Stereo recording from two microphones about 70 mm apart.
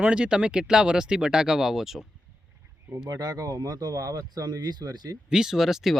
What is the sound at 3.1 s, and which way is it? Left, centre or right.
Speech, right.